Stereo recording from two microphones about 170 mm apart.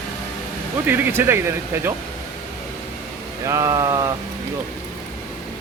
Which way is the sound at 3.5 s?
20° right (ahead or behind).